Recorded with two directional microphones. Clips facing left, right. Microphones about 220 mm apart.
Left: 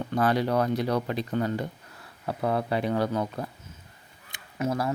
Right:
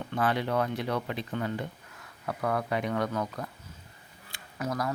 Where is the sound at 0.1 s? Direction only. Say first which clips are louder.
Left 4 dB; 40° left (ahead or behind).